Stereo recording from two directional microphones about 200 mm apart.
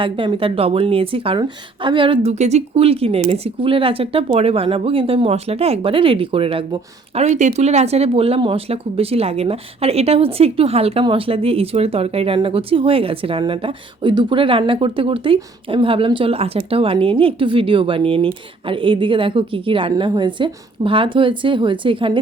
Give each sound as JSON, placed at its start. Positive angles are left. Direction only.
{"t": 0.0, "sound": "speech", "side_deg": -25}